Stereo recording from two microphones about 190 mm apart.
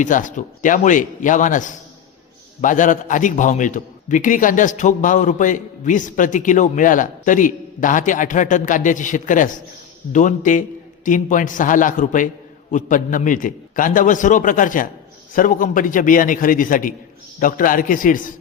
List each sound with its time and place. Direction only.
0.0 s a man's voice: 40° left (ahead or behind)